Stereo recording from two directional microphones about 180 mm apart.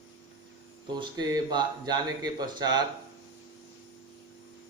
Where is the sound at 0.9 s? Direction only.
25° right (ahead or behind).